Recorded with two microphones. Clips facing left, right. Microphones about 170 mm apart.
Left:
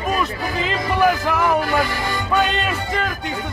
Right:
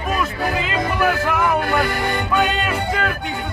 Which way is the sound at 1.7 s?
60° right (ahead or behind).